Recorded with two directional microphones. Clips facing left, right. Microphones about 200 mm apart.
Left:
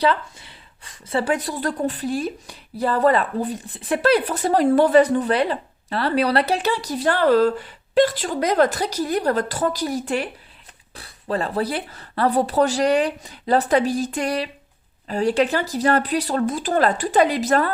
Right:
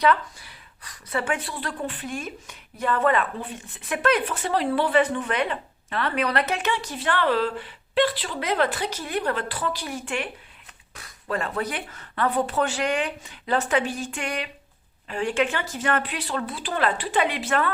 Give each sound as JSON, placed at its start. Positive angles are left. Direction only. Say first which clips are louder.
{"t": 0.0, "sound": "a woman's voice", "louder": "left 1 dB", "side_deg": 25}